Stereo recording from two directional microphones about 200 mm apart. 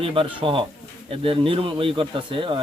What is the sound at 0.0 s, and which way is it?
Speech, 25° right (ahead or behind).